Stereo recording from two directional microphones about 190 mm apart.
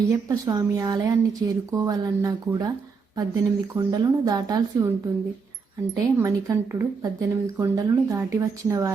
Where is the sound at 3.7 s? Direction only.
20° right (ahead or behind).